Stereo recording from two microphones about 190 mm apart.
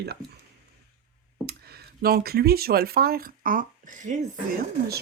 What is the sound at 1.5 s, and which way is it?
Speech, 55° right (ahead or behind).